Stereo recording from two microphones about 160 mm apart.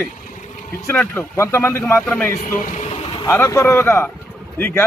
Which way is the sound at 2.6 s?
50° left (ahead or behind).